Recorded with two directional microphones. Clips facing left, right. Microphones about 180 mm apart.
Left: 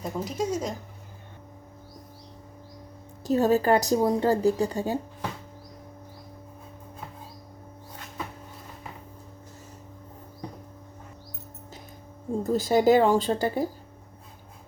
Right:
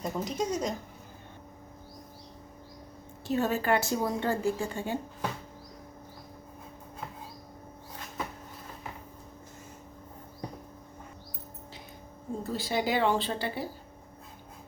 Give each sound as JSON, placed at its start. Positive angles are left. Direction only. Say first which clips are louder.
{"t": 0.0, "sound": "speech", "louder": "left 2 dB", "side_deg": 5}
{"t": 3.2, "sound": "speech", "louder": "left 6 dB", "side_deg": 40}
{"t": 12.4, "sound": "a woman's voice", "louder": "left 9 dB", "side_deg": 45}